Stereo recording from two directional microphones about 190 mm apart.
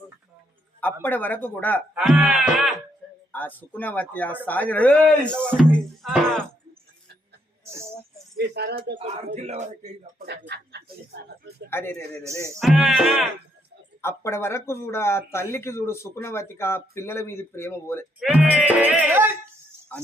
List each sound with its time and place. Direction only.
1.0 s speech: 10° left (ahead or behind)
2.0 s sheep: 5° right (ahead or behind)
3.3 s speech: 10° left (ahead or behind)
8.4 s speech: 60° right (ahead or behind)
9.0 s speech: 35° right (ahead or behind)
10.2 s speech: 60° right (ahead or behind)
11.7 s speech: 15° left (ahead or behind)
12.5 s speech: centre (ahead or behind)
14.0 s speech: 15° left (ahead or behind)
18.2 s music: 5° right (ahead or behind)